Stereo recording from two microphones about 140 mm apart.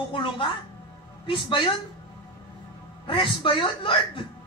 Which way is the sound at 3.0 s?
35° left (ahead or behind).